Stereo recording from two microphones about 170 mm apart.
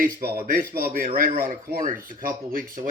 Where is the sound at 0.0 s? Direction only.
55° right (ahead or behind).